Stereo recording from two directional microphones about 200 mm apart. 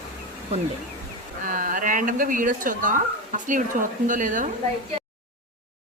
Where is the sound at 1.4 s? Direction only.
40° right (ahead or behind).